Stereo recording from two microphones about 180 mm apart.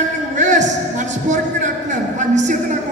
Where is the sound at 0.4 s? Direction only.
40° right (ahead or behind).